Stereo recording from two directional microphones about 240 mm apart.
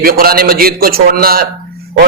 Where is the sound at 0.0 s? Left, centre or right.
Right.